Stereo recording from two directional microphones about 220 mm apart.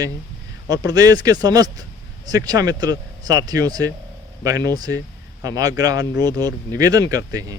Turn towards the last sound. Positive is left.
turn(degrees=-15)  # may be behind; listen again after turning